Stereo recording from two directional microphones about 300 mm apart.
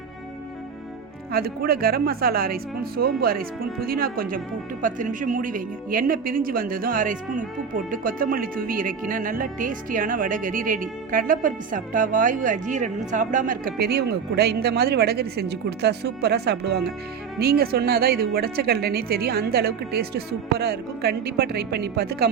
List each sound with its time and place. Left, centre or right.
1.3 s a woman's voice: right